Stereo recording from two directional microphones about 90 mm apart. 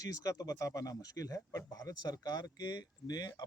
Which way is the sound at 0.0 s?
40° left (ahead or behind).